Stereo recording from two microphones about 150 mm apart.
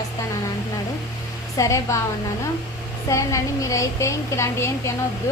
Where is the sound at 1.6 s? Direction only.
20° left (ahead or behind).